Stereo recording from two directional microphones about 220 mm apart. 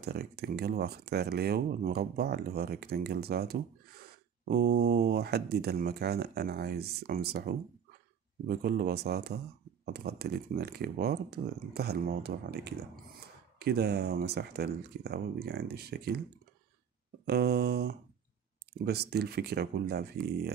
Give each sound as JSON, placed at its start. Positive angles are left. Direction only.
{"t": 0.0, "sound": "speech", "side_deg": -45}
{"t": 17.3, "sound": "speech", "side_deg": -45}